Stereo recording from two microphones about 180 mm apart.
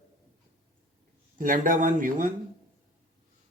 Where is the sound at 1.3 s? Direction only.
50° right (ahead or behind).